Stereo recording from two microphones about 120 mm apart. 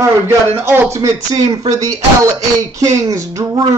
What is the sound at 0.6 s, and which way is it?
Speech, 20° right (ahead or behind).